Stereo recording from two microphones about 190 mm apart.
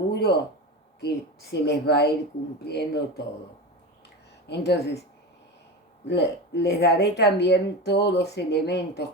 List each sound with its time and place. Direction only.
0.1 s a sound: 60° left (ahead or behind)
1.0 s speech: 60° left (ahead or behind)
4.4 s speech: 60° left (ahead or behind)
6.1 s speech: 60° left (ahead or behind)